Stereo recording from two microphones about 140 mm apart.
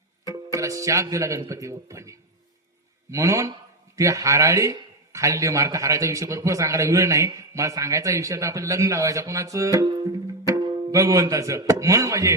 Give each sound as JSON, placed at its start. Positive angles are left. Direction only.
{"t": 0.3, "sound": "a man's voice", "side_deg": -25}